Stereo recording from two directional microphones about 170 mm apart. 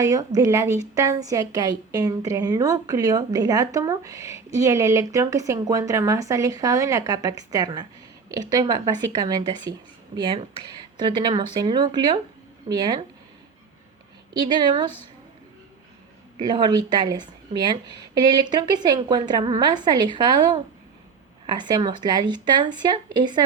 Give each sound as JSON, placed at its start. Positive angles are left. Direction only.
{"t": 0.0, "sound": "a woman's voice", "side_deg": -20}
{"t": 14.4, "sound": "a woman's voice", "side_deg": -25}
{"t": 16.4, "sound": "a woman's voice", "side_deg": -25}